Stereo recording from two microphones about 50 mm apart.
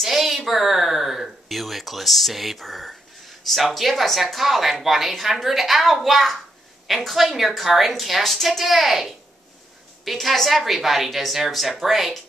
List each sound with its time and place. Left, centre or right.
0.0 s a sound: centre
3.4 s speech: centre
10.1 s speech: centre